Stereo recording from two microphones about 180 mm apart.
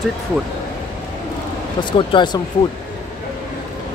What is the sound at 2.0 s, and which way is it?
Speech, 25° left (ahead or behind).